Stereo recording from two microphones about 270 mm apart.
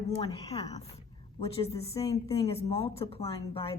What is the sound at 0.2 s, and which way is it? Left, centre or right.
Speech, centre.